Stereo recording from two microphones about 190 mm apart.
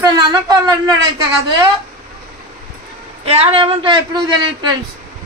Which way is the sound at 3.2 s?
30° right (ahead or behind).